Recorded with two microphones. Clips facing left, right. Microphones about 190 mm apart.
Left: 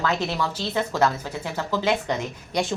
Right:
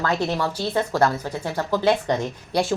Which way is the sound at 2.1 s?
30° right (ahead or behind).